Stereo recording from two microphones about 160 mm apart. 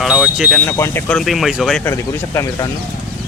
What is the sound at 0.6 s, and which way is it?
Speech, 15° left (ahead or behind).